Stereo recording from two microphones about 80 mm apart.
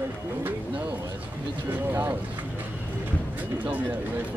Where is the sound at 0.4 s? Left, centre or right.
Right.